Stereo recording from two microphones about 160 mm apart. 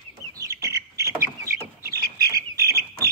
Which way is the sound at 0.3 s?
20° right (ahead or behind).